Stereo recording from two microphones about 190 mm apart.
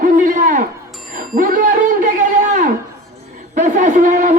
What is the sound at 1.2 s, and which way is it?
Music, 50° right (ahead or behind).